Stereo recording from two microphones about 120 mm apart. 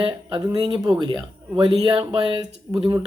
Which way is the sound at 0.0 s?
45° right (ahead or behind).